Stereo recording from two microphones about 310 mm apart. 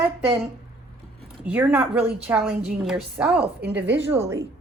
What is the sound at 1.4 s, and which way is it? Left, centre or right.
A woman's voice, centre.